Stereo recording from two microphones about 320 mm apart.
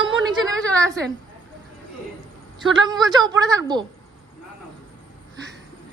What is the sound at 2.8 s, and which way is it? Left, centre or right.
A woman's voice, centre.